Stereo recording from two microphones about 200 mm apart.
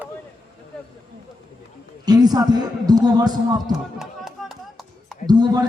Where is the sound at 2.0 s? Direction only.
20° right (ahead or behind).